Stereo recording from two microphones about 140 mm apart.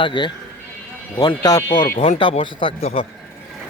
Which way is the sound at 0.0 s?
35° left (ahead or behind).